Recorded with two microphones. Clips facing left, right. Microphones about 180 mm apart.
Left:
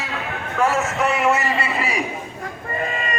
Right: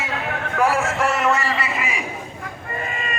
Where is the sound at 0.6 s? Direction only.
10° right (ahead or behind).